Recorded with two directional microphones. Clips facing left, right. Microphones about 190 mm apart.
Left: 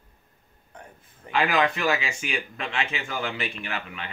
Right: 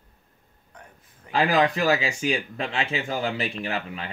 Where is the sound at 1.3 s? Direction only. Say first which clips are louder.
Right 2 dB; 35° right (ahead or behind).